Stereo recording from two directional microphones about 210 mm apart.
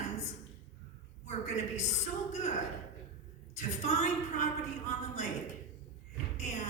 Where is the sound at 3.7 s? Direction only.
35° left (ahead or behind).